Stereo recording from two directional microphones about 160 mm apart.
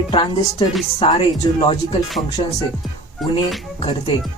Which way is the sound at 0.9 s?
40° left (ahead or behind).